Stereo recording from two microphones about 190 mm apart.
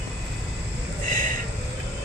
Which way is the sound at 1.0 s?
45° right (ahead or behind).